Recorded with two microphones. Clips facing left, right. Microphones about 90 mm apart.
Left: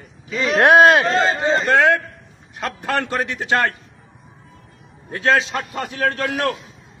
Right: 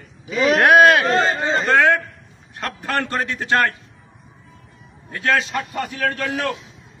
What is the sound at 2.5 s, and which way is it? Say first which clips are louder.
A man's voice: left 1 dB; 20° left (ahead or behind).